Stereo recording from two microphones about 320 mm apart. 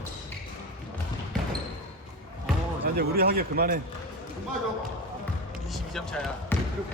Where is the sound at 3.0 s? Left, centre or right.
Right.